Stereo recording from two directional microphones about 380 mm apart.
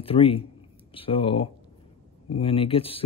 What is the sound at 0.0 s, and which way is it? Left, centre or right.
A man's voice, centre.